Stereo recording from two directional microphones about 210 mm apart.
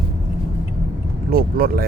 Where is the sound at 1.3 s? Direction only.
45° right (ahead or behind).